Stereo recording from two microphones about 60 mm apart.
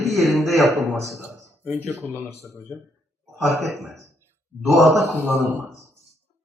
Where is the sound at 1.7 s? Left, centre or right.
Left.